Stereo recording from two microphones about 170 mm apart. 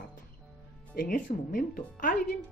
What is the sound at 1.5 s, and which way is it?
Speech, 50° left (ahead or behind).